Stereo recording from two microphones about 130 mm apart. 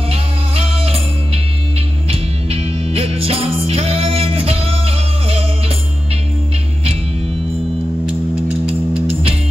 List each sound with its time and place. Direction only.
0.1 s music: 50° right (ahead or behind)
8.6 s music: 45° right (ahead or behind)